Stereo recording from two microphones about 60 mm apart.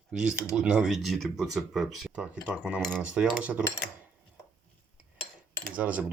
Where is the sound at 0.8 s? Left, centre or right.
Centre.